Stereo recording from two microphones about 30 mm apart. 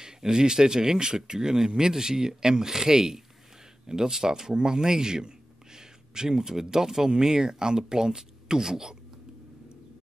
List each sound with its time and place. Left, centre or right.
0.0 s speech: right